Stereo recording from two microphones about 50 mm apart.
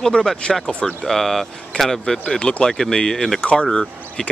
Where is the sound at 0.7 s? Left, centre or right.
Left.